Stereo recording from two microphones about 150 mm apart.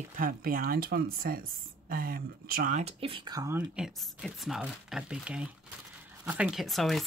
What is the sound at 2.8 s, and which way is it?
Speech, 35° right (ahead or behind).